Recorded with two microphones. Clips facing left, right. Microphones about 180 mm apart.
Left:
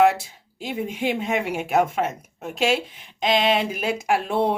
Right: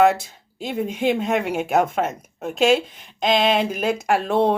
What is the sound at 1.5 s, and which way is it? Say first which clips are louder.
Speech: right 1 dB; 45° right (ahead or behind).